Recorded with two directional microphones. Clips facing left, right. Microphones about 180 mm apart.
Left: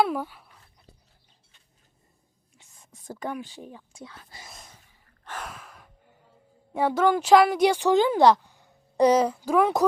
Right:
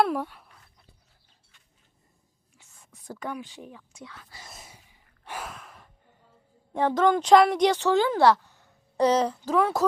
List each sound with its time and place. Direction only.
0.0 s a sound: centre (ahead or behind)
2.6 s whispering: 20° left (ahead or behind)
3.1 s speech: 35° left (ahead or behind)
4.4 s gasp: 5° right (ahead or behind)
5.5 s gasp: centre (ahead or behind)
6.7 s speech: 10° left (ahead or behind)